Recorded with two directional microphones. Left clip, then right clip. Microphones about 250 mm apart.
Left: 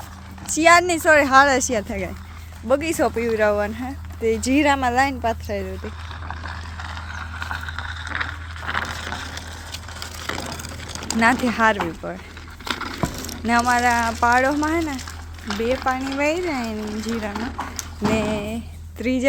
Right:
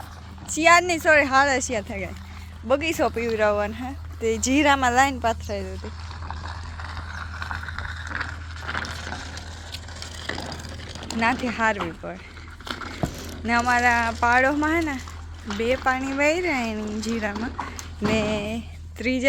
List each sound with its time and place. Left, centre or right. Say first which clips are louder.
0.4 s speech: left 3 dB; centre
6.7 s a sound: left 3 dB; right
10.0 s crumpling: left 3 dB; centre
11.2 s speech: left 5 dB; centre
18.1 s speech: left 1 dB; centre